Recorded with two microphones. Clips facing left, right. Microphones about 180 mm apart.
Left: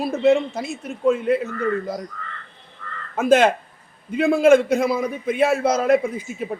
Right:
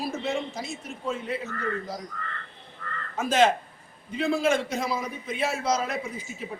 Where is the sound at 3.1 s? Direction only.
55° left (ahead or behind).